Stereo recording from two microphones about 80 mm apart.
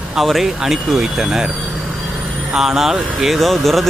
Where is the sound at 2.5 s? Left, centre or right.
Centre.